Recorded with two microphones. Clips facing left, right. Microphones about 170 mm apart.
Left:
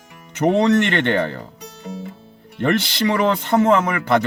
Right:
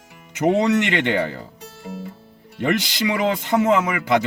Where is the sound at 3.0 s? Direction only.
55° left (ahead or behind).